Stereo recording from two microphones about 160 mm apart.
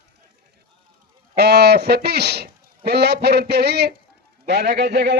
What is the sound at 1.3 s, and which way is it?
A man's voice, 90° right.